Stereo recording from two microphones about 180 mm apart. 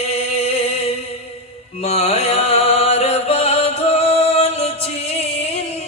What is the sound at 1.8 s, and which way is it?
Chant, 35° left (ahead or behind).